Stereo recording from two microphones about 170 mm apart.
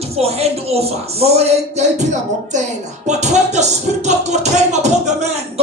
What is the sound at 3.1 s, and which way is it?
Music, 40° right (ahead or behind).